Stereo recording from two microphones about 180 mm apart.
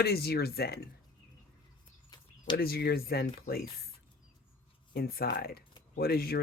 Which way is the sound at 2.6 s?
60° left (ahead or behind).